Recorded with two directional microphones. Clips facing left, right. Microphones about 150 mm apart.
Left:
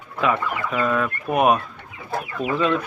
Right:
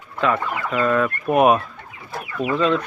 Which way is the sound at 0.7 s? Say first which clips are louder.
Right 3 dB; 5° left (ahead or behind).